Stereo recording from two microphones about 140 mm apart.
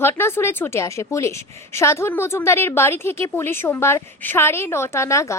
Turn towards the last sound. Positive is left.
turn(degrees=20)  # may be behind; listen again after turning